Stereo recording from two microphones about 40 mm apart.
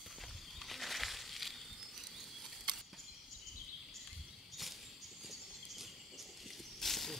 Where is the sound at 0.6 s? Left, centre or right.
Centre.